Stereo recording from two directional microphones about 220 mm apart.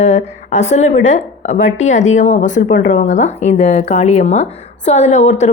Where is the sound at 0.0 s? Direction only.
30° left (ahead or behind).